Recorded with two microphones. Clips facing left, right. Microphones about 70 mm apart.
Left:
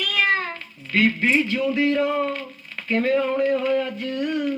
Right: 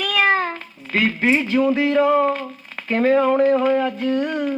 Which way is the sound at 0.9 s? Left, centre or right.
Right.